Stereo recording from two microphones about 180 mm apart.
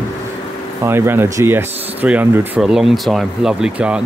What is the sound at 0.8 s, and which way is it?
Speech, 15° right (ahead or behind).